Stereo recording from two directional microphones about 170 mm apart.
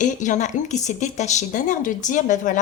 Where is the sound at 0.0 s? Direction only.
45° left (ahead or behind).